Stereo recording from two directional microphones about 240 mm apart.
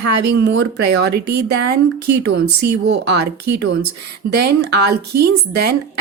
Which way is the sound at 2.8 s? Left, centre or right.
Right.